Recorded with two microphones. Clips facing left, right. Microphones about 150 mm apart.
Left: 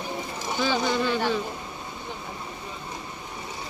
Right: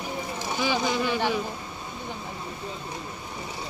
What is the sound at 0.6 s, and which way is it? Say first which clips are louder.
Speech: left 1 dB; 10° right (ahead or behind).